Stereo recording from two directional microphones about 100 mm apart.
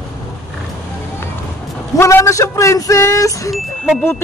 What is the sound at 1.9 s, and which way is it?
Speech, 30° left (ahead or behind).